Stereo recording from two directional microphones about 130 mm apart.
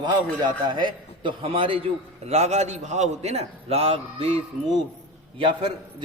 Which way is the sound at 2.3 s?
55° right (ahead or behind).